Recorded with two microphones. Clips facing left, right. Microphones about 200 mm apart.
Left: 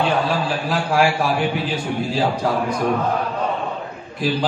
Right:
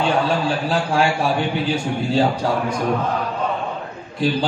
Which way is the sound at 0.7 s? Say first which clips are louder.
Left 2 dB; 30° right (ahead or behind).